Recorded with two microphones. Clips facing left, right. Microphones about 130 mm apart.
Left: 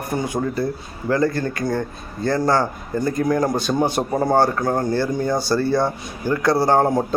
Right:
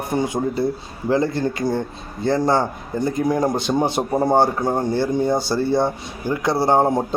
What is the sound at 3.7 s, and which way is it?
Speech, 20° right (ahead or behind).